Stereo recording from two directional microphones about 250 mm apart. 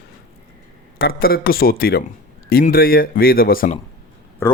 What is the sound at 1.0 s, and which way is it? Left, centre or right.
Speech, left.